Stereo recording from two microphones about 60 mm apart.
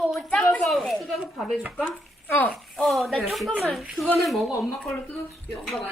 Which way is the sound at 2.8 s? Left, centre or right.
Centre.